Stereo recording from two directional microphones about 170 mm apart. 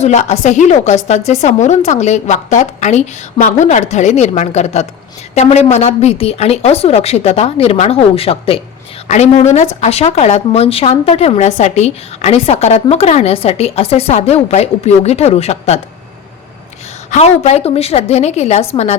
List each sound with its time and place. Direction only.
0.0 s a woman's voice: 40° left (ahead or behind)
17.1 s speech: 40° left (ahead or behind)